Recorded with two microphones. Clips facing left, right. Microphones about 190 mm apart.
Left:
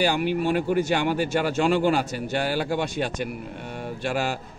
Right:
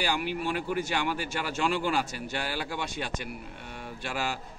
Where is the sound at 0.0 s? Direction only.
55° left (ahead or behind).